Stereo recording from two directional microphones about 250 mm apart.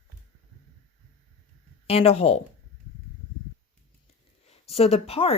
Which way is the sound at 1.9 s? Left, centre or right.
Left.